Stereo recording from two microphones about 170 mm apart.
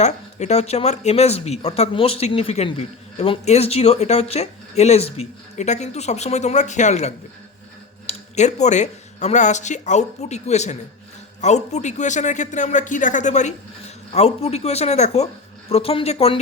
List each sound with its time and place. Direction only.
0.0 s a man's voice: 40° left (ahead or behind)